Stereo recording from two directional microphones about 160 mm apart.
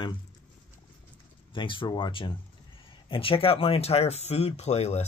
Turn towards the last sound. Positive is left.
turn(degrees=45)  # may be behind; listen again after turning